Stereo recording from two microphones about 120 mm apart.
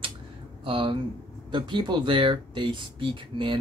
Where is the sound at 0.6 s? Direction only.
45° right (ahead or behind).